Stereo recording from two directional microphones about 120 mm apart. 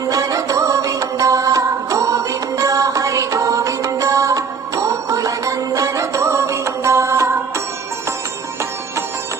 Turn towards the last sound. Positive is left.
turn(degrees=-25)  # may be behind; listen again after turning